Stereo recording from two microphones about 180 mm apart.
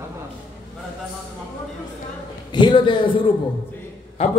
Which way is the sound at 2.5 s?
25° left (ahead or behind).